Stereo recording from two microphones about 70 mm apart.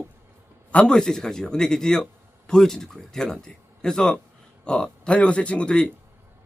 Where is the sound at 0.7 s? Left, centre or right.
Centre.